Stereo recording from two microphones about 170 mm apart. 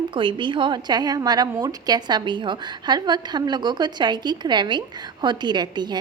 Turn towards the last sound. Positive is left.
turn(degrees=-25)  # may be behind; listen again after turning